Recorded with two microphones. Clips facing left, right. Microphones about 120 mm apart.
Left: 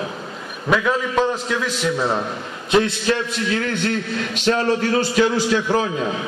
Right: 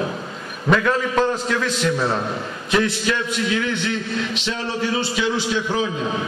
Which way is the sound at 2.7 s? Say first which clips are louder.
Left 3 dB; 25° left (ahead or behind).